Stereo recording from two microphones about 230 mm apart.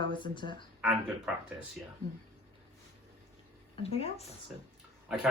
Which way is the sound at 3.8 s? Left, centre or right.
Left.